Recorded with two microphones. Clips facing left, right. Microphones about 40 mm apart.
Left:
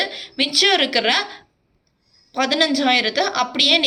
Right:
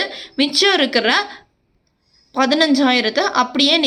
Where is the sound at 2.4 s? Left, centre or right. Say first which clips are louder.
Right 4 dB; centre.